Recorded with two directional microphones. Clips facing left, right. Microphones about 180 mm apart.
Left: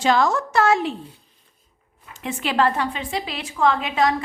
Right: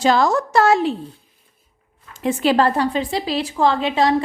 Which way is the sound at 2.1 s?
40° right (ahead or behind).